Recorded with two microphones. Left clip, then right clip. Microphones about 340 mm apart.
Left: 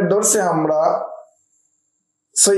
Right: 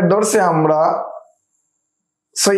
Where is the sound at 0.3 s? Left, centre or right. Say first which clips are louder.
Right 3 dB; right.